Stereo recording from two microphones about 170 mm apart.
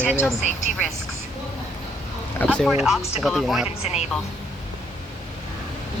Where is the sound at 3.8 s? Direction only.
40° left (ahead or behind).